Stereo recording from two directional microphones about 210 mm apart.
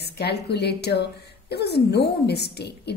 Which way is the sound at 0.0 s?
50° left (ahead or behind).